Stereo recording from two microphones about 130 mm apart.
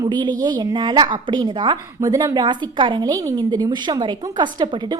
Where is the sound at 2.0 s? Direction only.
25° right (ahead or behind).